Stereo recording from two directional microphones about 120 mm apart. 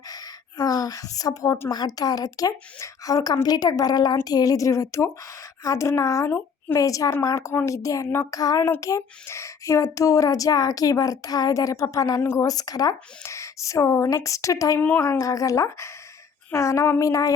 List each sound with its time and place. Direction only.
0.1 s gasp: 30° left (ahead or behind)
1.7 s a woman's voice: 35° left (ahead or behind)